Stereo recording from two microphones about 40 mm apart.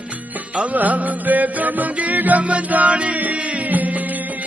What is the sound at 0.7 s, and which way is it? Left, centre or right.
Music, right.